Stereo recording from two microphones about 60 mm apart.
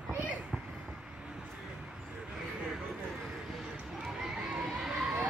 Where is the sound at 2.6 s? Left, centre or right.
Centre.